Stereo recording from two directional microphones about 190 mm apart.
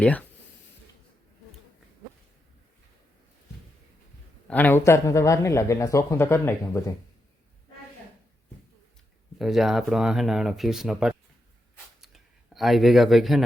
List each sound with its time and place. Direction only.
0.0 s speech: 5° left (ahead or behind)
4.4 s speech: 10° left (ahead or behind)
9.4 s speech: centre (ahead or behind)
11.9 s a sound: centre (ahead or behind)